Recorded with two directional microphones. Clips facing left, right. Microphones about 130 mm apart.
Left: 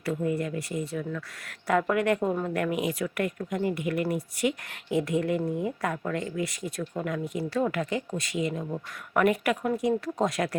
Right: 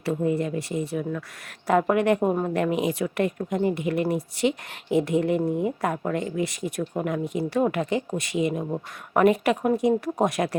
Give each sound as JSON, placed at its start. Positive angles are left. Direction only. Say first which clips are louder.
{"t": 0.0, "sound": "speech", "louder": "right 4 dB", "side_deg": -25}